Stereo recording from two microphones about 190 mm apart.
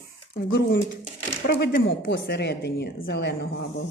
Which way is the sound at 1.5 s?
60° left (ahead or behind).